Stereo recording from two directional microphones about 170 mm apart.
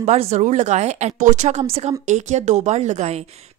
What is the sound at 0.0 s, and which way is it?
A woman's voice, 40° right (ahead or behind).